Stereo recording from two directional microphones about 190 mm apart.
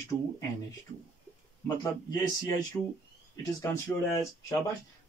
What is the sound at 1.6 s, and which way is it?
Speech, 20° left (ahead or behind).